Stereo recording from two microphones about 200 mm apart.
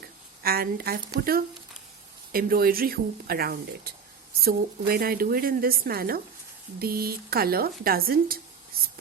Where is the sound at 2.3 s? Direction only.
45° right (ahead or behind).